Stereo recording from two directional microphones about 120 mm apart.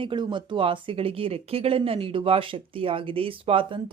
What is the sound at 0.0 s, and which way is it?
Speech, 40° right (ahead or behind).